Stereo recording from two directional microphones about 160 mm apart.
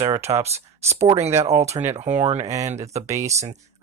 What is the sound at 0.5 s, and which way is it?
Speech, 40° right (ahead or behind).